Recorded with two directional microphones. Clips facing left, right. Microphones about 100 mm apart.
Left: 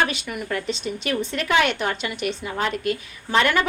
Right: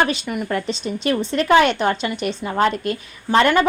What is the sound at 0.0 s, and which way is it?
A woman's voice, 30° right (ahead or behind).